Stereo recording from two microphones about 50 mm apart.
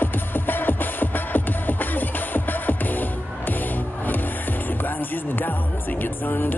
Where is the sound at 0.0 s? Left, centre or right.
Left.